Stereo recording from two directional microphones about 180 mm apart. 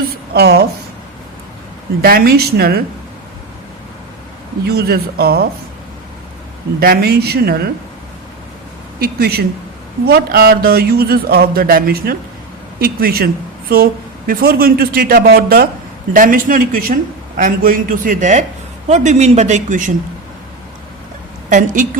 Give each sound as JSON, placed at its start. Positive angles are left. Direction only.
{"t": 0.3, "sound": "speech", "side_deg": -60}
{"t": 2.0, "sound": "speech", "side_deg": -55}
{"t": 4.6, "sound": "speech", "side_deg": -60}
{"t": 6.7, "sound": "speech", "side_deg": -55}
{"t": 9.0, "sound": "a man's voice", "side_deg": -60}
{"t": 21.5, "sound": "a man's voice", "side_deg": -45}